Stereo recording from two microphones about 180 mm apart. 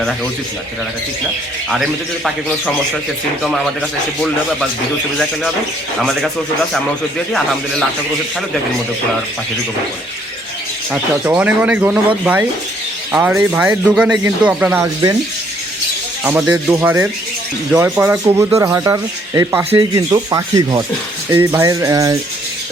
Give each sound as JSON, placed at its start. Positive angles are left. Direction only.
{"t": 1.7, "sound": "a man's voice", "side_deg": 0}
{"t": 11.3, "sound": "speech", "side_deg": -10}
{"t": 16.2, "sound": "speech", "side_deg": -5}